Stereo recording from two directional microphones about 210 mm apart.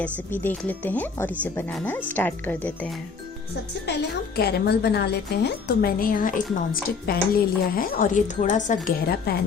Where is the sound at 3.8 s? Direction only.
50° left (ahead or behind).